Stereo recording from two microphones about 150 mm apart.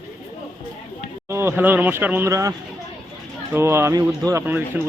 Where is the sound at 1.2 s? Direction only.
15° right (ahead or behind).